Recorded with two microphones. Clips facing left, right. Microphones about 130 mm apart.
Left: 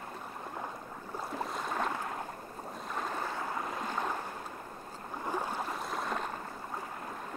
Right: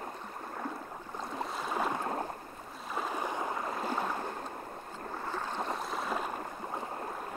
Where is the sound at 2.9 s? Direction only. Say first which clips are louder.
Right 3 dB; 10° right (ahead or behind).